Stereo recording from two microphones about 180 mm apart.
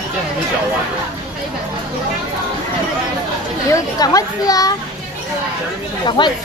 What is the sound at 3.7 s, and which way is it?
Speech, 20° left (ahead or behind).